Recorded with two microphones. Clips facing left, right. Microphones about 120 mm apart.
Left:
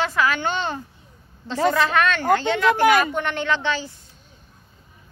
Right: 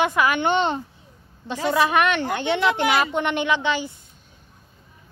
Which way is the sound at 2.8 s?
45° left (ahead or behind).